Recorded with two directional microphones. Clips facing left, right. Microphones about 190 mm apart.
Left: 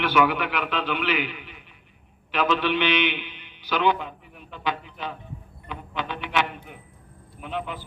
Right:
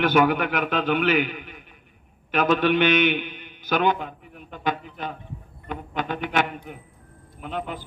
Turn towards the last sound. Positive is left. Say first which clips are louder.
# right 1 dB
turn(degrees=-45)  # may be behind; listen again after turning